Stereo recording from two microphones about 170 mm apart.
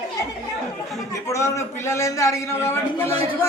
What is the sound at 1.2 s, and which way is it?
A man's voice, 15° left (ahead or behind).